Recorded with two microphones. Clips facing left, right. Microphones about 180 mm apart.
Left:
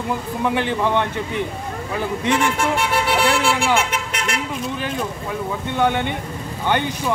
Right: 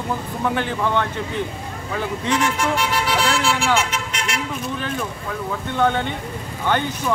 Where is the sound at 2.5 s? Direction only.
55° left (ahead or behind).